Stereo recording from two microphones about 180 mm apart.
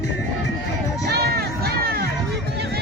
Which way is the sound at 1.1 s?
60° right (ahead or behind).